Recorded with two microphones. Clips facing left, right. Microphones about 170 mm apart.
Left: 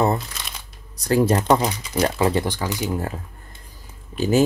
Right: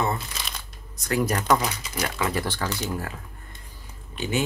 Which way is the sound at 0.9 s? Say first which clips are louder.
Left 7 dB; 30° left (ahead or behind).